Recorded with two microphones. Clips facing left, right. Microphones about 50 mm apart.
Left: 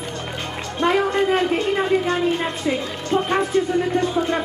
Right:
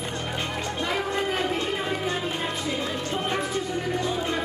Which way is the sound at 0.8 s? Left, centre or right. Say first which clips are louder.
Left 10 dB; left.